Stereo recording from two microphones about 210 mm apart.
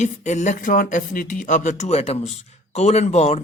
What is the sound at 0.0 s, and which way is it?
Speech, 35° left (ahead or behind).